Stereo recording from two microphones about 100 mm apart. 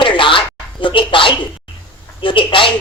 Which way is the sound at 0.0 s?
60° left (ahead or behind).